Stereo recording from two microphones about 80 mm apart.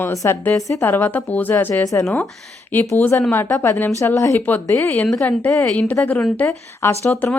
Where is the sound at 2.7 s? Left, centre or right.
Left.